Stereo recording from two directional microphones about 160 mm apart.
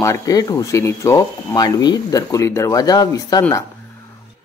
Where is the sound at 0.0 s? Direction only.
20° left (ahead or behind).